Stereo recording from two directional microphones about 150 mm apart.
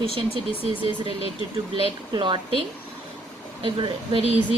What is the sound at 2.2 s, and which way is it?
Speech, 35° right (ahead or behind).